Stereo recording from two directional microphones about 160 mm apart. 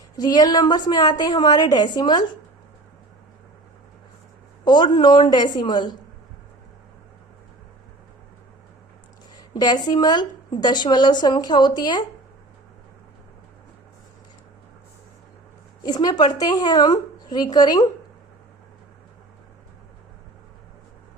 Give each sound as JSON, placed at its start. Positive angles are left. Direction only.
{"t": 0.2, "sound": "a woman's voice", "side_deg": 25}
{"t": 4.6, "sound": "a woman's voice", "side_deg": 30}
{"t": 9.5, "sound": "a woman's voice", "side_deg": 25}
{"t": 15.8, "sound": "a woman's voice", "side_deg": 25}